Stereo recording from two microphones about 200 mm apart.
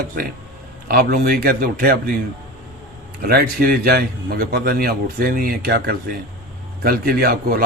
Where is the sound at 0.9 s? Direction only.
45° right (ahead or behind).